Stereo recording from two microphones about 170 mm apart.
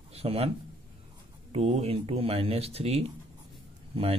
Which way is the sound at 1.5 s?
35° right (ahead or behind).